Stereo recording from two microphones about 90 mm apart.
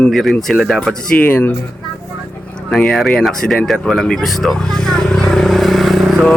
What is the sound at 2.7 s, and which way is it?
Speech, 5° left (ahead or behind).